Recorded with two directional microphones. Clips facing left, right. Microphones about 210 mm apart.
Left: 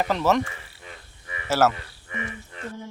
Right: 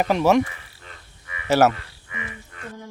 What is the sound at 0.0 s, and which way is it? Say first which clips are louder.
Speech: right 4 dB; 15° right (ahead or behind).